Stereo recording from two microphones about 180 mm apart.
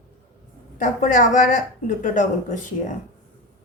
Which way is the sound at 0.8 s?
45° left (ahead or behind).